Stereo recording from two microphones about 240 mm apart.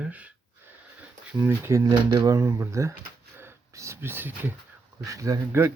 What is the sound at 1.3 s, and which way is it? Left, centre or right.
Speech, centre.